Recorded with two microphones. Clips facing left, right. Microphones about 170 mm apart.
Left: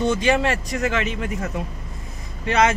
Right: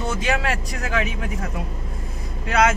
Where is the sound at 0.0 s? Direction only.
5° right (ahead or behind).